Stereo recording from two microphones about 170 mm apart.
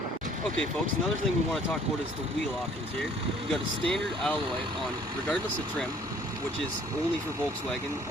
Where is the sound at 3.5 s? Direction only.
5° left (ahead or behind).